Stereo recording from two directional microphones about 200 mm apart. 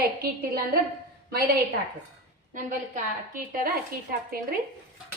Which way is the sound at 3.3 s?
45° right (ahead or behind).